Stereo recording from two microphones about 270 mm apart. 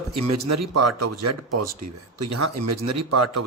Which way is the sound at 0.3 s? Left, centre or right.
Right.